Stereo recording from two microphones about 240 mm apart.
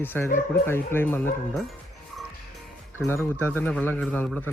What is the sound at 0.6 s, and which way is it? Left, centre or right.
A man's voice, centre.